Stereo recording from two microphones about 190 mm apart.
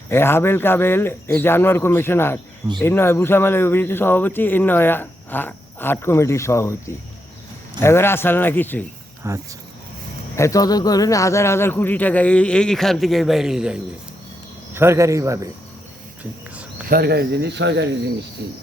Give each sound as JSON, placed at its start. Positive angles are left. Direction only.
{"t": 0.1, "sound": "speech", "side_deg": 10}
{"t": 9.2, "sound": "speech", "side_deg": -15}
{"t": 10.3, "sound": "speech", "side_deg": 15}
{"t": 16.9, "sound": "speech", "side_deg": -55}